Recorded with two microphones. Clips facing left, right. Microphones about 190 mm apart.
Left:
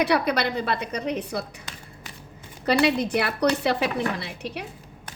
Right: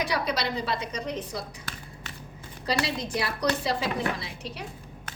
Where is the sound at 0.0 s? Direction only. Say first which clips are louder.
Left 6 dB; 60° left (ahead or behind).